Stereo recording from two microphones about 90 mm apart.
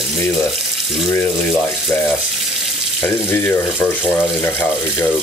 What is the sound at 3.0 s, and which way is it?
Speech, 25° left (ahead or behind).